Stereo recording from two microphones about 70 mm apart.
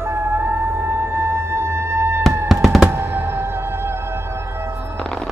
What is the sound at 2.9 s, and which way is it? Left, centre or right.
Music, right.